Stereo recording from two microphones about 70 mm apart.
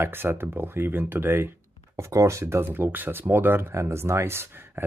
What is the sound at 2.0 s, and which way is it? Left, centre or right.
Speech, right.